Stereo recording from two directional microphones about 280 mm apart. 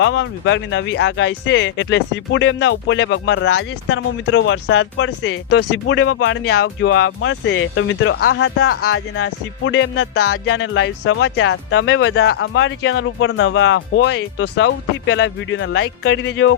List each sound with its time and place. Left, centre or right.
0.0 s speech: left
10.3 s speech: left